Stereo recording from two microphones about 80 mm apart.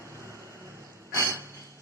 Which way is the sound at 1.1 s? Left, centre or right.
Right.